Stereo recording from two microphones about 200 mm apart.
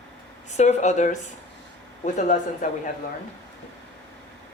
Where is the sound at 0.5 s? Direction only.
35° left (ahead or behind).